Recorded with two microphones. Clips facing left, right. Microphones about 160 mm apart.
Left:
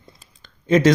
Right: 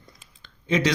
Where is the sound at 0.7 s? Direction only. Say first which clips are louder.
Left 7 dB; 45° left (ahead or behind).